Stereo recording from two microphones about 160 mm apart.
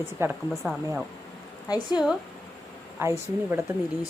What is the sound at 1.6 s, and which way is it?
Speech, 25° left (ahead or behind).